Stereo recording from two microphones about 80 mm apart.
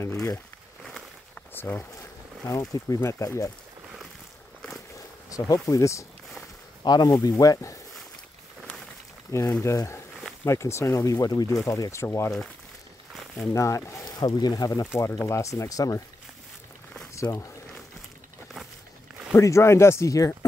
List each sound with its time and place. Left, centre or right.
1.5 s speech: left
2.4 s speech: left
4.9 s speech: left
6.8 s speech: left
7.1 s speech: left
9.3 s speech: left
11.6 s speech: left
13.4 s speech: left
14.0 s speech: left
15.0 s speech: left
17.1 s speech: left
19.3 s speech: left